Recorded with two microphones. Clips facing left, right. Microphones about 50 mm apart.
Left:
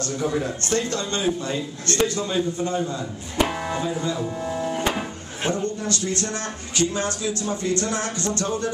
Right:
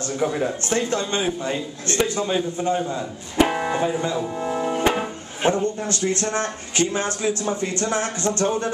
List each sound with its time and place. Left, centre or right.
0.0 s a man's voice: centre
4.4 s music: right
4.9 s a man's voice: right